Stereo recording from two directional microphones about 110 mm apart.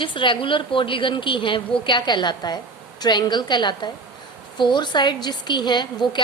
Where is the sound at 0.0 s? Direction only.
50° left (ahead or behind).